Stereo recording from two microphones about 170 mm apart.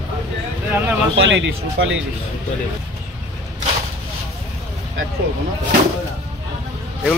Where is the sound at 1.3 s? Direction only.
90° right.